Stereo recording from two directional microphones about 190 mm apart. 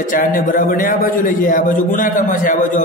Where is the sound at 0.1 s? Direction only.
45° left (ahead or behind).